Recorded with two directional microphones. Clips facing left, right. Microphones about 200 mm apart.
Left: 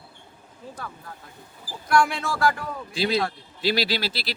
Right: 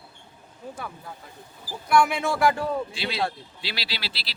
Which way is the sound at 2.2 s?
20° right (ahead or behind).